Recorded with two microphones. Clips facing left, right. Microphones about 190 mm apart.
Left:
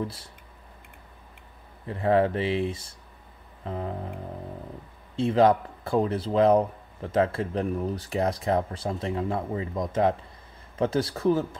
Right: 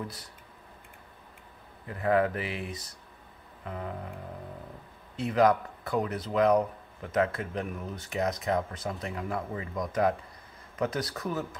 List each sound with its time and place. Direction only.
1.9 s speech: 30° left (ahead or behind)
3.6 s music: 30° left (ahead or behind)
5.1 s speech: 25° left (ahead or behind)